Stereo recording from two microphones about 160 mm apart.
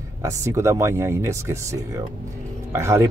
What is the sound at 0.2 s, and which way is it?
Speech, 20° right (ahead or behind).